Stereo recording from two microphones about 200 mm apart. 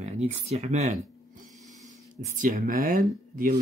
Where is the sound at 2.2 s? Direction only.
40° right (ahead or behind).